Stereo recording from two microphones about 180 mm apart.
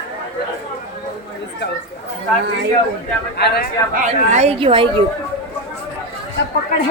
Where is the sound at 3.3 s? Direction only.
60° left (ahead or behind).